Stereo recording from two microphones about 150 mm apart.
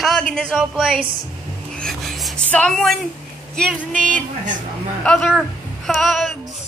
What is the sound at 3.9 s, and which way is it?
Speech, 60° right (ahead or behind).